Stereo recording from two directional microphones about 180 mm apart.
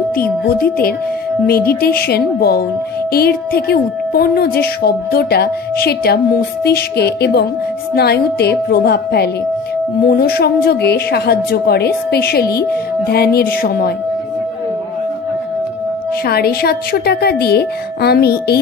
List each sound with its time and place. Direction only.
0.2 s speech: 55° left (ahead or behind)
16.3 s speech: 60° left (ahead or behind)